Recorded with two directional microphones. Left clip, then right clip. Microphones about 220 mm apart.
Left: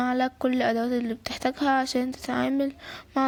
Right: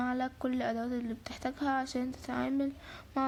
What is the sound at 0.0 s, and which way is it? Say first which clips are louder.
Speech: left 9 dB; 30° left (ahead or behind).